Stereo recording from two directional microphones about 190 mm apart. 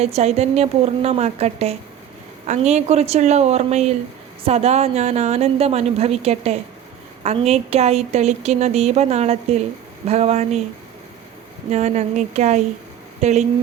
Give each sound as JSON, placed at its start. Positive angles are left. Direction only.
{"t": 0.0, "sound": "a woman's voice", "side_deg": -35}
{"t": 11.7, "sound": "a woman's voice", "side_deg": -35}